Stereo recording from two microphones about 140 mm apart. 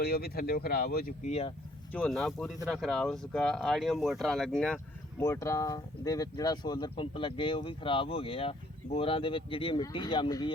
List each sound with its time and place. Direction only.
0.0 s speech: 90° left
1.3 s speech: 45° left (ahead or behind)
1.9 s speech: 5° left (ahead or behind)
5.2 s speech: 20° left (ahead or behind)